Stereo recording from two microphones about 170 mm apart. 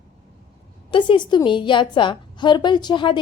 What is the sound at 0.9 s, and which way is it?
A woman's voice, 30° left (ahead or behind).